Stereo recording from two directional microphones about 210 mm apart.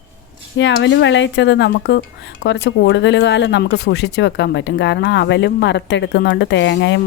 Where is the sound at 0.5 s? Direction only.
60° left (ahead or behind).